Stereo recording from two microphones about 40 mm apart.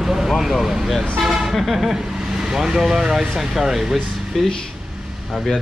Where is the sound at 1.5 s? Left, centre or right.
Centre.